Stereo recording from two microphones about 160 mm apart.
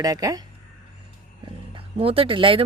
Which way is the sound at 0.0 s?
25° right (ahead or behind).